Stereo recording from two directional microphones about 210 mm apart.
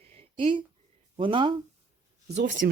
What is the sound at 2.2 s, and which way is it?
Speech, 50° right (ahead or behind).